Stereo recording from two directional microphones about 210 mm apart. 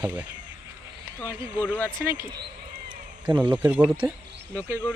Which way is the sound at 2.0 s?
40° right (ahead or behind).